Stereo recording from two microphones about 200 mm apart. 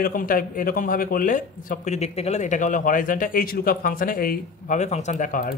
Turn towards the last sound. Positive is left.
turn(degrees=45)  # may be behind; listen again after turning